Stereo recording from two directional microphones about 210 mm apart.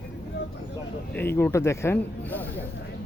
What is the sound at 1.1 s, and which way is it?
Speech, 10° left (ahead or behind).